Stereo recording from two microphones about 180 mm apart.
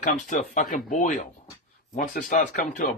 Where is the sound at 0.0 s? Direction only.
45° left (ahead or behind).